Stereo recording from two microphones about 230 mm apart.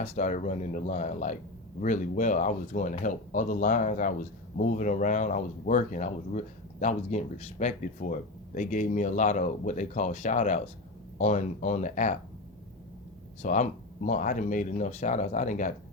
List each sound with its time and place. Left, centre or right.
0.0 s speech: left
13.4 s speech: left